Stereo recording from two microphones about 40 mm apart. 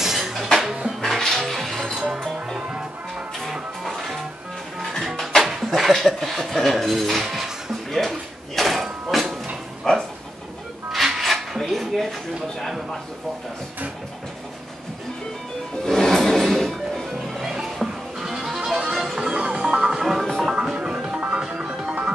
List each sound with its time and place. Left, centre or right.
0.0 s music: centre
3.8 s music: centre
5.5 s speech: centre
7.9 s a sound: centre
9.9 s dog: centre
10.9 s a sound: centre
15.8 s music: centre
17.3 s music: centre
20.5 s music: centre